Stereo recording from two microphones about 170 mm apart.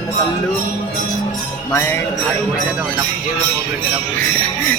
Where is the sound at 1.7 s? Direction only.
15° left (ahead or behind).